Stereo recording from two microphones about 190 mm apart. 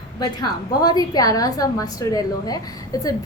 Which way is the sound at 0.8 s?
20° left (ahead or behind).